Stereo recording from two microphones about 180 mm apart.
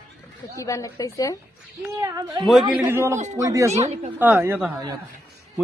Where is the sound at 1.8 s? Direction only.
20° right (ahead or behind).